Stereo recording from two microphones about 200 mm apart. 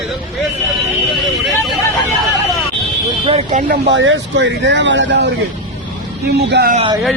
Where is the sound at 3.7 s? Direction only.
65° right (ahead or behind).